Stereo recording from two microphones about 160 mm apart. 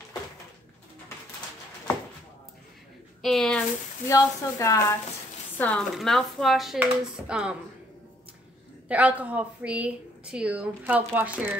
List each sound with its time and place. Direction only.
3.2 s a sound: centre (ahead or behind)
4.1 s a woman's voice: 20° left (ahead or behind)
5.6 s speech: 5° left (ahead or behind)
8.8 s speech: 10° right (ahead or behind)